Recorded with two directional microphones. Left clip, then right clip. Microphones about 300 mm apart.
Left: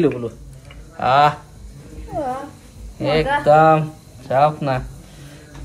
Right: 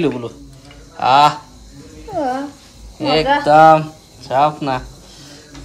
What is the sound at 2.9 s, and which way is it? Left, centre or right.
Speech, centre.